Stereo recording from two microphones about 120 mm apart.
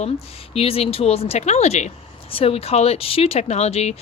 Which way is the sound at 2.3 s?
55° left (ahead or behind).